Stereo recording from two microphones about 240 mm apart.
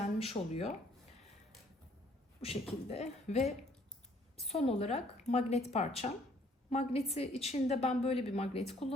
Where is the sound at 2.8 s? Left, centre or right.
Left.